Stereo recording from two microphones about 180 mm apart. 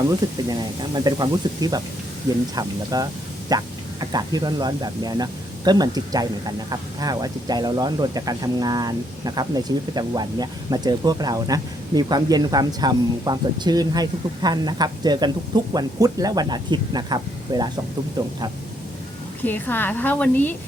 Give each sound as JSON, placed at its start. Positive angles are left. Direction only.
{"t": 0.4, "sound": "speech", "side_deg": -25}
{"t": 19.5, "sound": "a woman's voice", "side_deg": 10}